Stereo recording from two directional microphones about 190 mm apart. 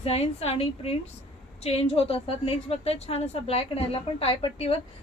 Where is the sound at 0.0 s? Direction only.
30° left (ahead or behind).